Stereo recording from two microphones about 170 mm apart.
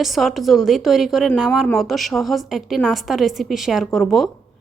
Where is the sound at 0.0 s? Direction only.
Centre (ahead or behind).